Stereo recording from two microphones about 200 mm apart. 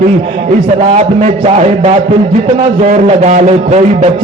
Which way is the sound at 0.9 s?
35° right (ahead or behind).